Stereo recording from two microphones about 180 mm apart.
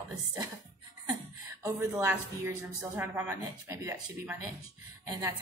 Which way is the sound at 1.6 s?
15° right (ahead or behind).